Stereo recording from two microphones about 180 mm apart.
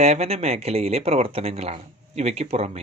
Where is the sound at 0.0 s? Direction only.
35° right (ahead or behind).